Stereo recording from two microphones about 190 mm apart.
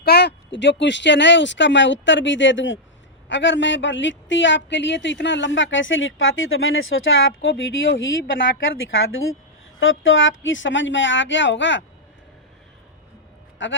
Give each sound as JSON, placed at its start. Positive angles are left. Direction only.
{"t": 0.0, "sound": "speech", "side_deg": 60}
{"t": 8.9, "sound": "speech", "side_deg": 90}
{"t": 13.6, "sound": "speech", "side_deg": 75}